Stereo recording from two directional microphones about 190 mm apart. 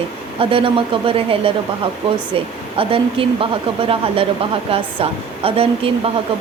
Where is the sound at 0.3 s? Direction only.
30° right (ahead or behind).